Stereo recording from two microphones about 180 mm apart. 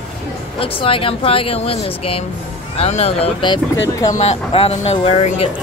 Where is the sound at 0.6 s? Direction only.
30° left (ahead or behind).